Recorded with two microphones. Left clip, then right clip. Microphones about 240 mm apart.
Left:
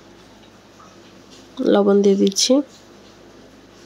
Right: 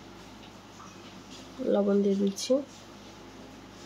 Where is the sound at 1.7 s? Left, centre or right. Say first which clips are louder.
Left 11 dB; left.